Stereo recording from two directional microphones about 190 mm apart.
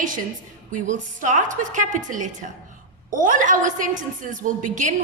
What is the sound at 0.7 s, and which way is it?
A woman's voice, 40° right (ahead or behind).